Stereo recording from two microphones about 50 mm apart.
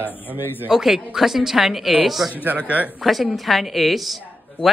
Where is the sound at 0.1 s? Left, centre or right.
Left.